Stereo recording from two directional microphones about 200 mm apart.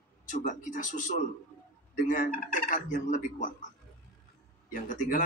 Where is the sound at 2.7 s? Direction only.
40° left (ahead or behind).